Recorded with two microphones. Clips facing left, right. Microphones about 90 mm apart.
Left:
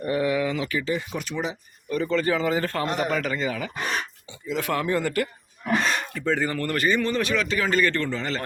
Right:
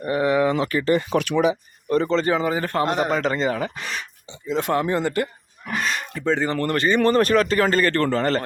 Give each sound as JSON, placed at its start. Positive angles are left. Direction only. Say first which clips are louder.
{"t": 0.0, "sound": "speech", "louder": "right 4 dB", "side_deg": -35}
{"t": 1.9, "sound": "speech", "louder": "right 4 dB", "side_deg": -30}
{"t": 7.0, "sound": "speech", "louder": "right 7 dB", "side_deg": -50}